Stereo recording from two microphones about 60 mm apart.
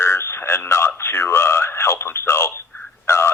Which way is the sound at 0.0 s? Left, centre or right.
Left.